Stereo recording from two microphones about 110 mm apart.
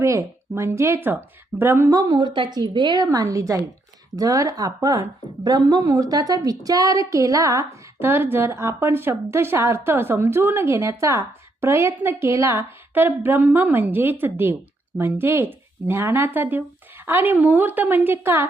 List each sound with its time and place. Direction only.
0.0 s a woman's voice: 25° right (ahead or behind)
1.9 s a woman's voice: 35° right (ahead or behind)